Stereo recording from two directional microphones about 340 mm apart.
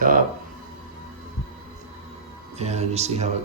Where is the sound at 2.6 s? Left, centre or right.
Centre.